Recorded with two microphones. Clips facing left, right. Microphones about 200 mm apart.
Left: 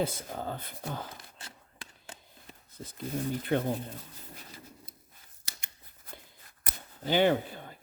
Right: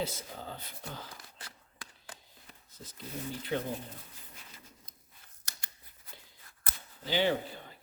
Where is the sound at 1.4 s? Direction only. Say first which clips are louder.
Left 2 dB; 25° left (ahead or behind).